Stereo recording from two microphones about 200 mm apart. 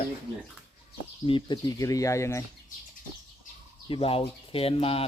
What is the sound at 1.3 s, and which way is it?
Speech, 25° left (ahead or behind).